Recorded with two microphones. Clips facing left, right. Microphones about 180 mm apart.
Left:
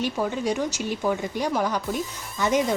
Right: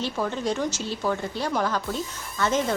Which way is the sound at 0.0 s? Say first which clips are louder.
Left 2 dB; 10° left (ahead or behind).